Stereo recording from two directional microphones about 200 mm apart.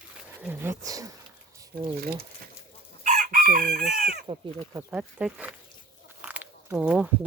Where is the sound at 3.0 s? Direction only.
40° right (ahead or behind).